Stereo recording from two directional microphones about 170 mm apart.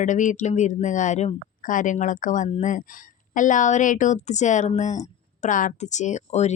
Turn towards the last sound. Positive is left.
turn(degrees=40)  # may be behind; listen again after turning